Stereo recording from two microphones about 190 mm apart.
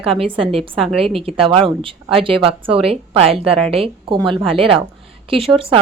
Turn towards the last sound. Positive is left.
turn(degrees=-30)  # may be behind; listen again after turning